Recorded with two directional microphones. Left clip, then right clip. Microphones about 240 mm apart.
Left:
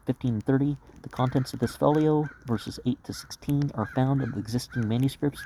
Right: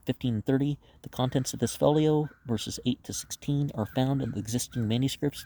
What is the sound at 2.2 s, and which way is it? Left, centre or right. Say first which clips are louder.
Speech: left 2 dB; centre.